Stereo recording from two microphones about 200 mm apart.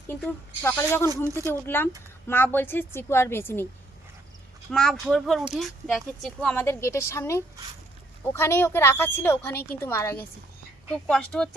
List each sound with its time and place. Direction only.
0.1 s speech: 10° left (ahead or behind)
1.1 s speech: 15° right (ahead or behind)
1.5 s speech: 10° left (ahead or behind)
4.7 s speech: centre (ahead or behind)